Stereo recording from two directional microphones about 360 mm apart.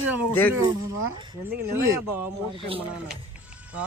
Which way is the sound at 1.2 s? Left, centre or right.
Centre.